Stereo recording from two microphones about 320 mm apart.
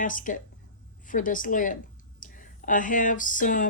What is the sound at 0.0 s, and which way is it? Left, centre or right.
Speech, left.